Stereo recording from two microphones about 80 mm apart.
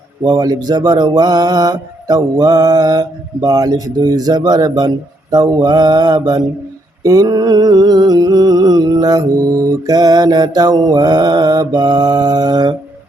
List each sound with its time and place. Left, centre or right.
0.3 s mantra: right